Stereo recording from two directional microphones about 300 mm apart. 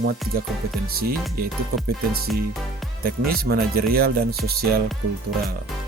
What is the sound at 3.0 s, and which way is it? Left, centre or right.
Speech, right.